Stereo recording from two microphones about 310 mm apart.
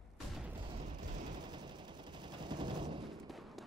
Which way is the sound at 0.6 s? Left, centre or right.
Centre.